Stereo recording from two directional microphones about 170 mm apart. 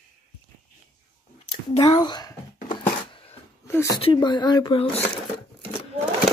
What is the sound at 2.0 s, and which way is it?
Speech, 25° left (ahead or behind).